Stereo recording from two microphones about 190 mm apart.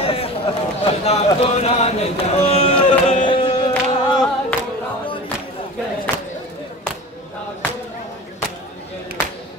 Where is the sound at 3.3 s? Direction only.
25° left (ahead or behind).